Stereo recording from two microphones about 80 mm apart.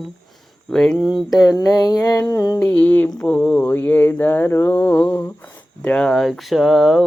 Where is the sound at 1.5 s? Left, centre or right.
Left.